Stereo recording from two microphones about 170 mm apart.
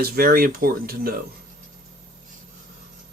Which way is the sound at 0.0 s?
60° right (ahead or behind).